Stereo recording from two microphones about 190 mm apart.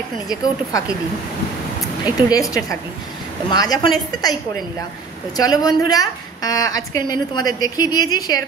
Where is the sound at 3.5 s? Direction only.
20° left (ahead or behind).